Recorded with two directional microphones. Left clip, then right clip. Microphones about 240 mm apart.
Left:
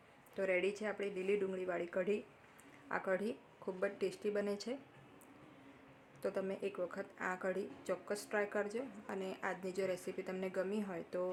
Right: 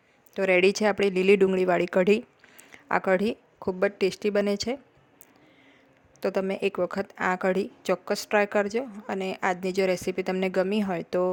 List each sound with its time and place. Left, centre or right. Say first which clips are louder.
0.3 s speech: right 15 dB; right
6.1 s speech: right 13 dB; right